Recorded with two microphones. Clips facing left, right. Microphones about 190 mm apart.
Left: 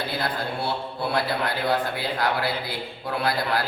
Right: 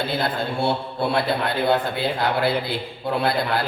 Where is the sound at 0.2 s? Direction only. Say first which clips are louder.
Right 4 dB; 25° right (ahead or behind).